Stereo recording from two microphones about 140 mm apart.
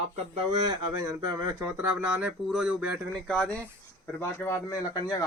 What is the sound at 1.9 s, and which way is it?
Speech, 5° right (ahead or behind).